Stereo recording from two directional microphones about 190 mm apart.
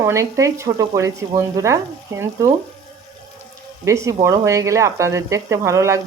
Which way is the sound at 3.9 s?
15° right (ahead or behind).